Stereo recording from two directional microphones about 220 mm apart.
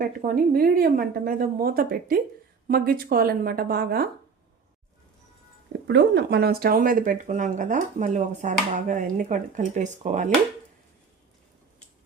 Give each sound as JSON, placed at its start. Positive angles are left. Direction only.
{"t": 0.0, "sound": "a woman's voice", "side_deg": -40}
{"t": 5.9, "sound": "speech", "side_deg": -50}